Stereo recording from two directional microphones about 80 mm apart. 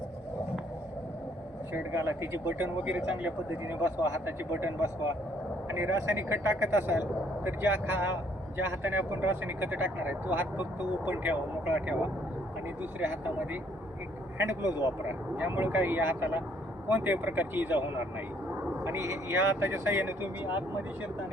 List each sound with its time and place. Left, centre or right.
1.7 s speech: right
2.8 s speech: centre
18.8 s speech: right